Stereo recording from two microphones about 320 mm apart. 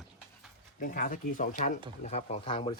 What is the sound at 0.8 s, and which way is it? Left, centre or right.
Speech, left.